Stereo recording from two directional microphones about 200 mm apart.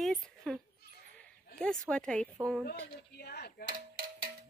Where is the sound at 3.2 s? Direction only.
50° left (ahead or behind).